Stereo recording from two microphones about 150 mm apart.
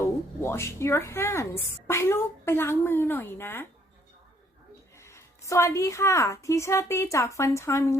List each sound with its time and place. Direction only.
0.0 s a woman's voice: 15° left (ahead or behind)
4.9 s a woman's voice: 20° left (ahead or behind)